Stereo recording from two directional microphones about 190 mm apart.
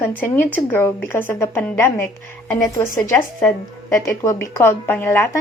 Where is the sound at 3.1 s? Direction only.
10° left (ahead or behind).